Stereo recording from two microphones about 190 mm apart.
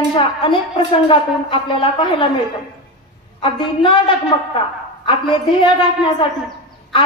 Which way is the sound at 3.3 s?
30° left (ahead or behind).